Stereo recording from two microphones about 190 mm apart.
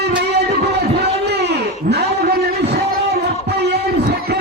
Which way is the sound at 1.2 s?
60° right (ahead or behind).